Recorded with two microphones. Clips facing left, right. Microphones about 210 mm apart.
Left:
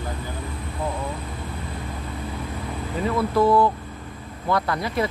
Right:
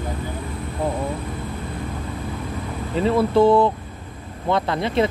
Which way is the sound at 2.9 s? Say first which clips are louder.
Right 5 dB; 25° right (ahead or behind).